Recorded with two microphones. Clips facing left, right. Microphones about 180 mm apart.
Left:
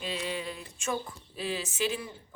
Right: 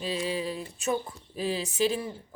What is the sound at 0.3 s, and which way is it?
Speech, 35° right (ahead or behind).